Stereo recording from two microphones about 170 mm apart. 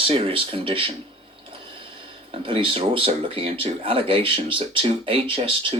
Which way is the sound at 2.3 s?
30° right (ahead or behind).